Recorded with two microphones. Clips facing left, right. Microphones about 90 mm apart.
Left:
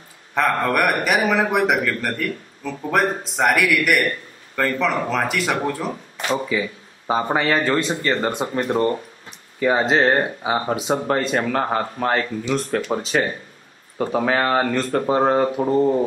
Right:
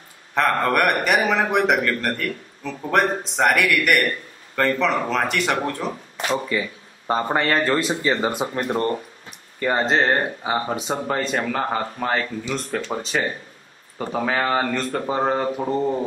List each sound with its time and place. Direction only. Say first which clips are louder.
0.3 s speech: even; centre (ahead or behind)